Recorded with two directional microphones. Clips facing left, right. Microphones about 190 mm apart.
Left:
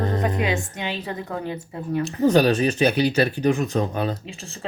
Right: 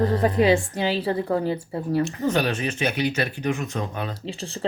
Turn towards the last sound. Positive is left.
turn(degrees=-35)  # may be behind; listen again after turning